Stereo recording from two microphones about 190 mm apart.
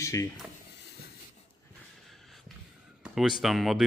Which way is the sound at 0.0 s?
15° left (ahead or behind).